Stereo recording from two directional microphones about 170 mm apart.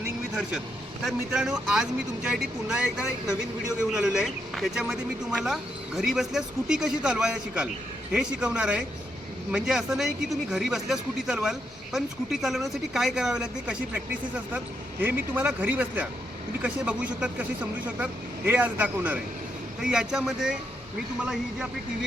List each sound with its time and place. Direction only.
1.0 s speech: 5° right (ahead or behind)